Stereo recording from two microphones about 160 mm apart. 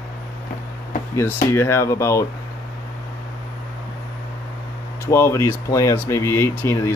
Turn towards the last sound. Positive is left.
turn(degrees=15)  # may be behind; listen again after turning